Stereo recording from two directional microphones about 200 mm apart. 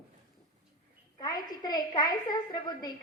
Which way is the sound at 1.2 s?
20° left (ahead or behind).